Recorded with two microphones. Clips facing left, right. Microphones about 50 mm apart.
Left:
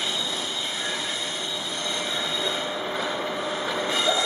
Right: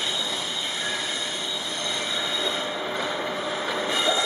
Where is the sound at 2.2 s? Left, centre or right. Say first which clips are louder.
Even; centre.